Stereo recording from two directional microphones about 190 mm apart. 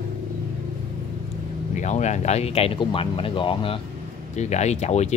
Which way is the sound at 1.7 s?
40° left (ahead or behind).